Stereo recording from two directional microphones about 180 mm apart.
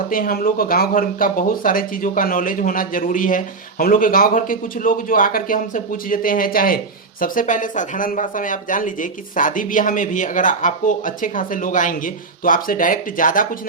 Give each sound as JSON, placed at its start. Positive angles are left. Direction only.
{"t": 0.1, "sound": "speech", "side_deg": 55}